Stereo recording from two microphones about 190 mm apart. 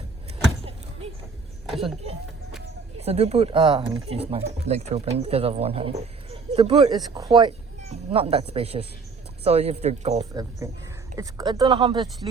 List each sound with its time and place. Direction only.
3.0 s speech: 35° right (ahead or behind)
11.2 s speech: 20° right (ahead or behind)